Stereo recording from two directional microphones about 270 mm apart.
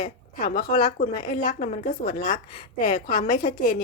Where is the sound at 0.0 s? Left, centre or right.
Left.